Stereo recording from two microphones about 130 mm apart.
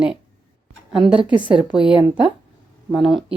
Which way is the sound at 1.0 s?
40° right (ahead or behind).